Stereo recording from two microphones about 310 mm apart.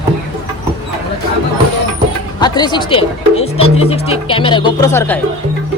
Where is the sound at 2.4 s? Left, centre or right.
Centre.